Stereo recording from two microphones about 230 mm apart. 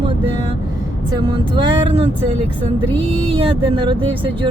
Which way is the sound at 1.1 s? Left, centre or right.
Right.